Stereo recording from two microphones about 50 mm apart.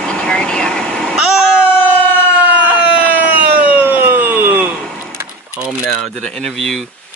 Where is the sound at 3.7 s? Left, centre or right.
Right.